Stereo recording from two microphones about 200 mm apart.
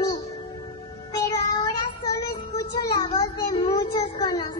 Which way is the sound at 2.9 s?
20° left (ahead or behind).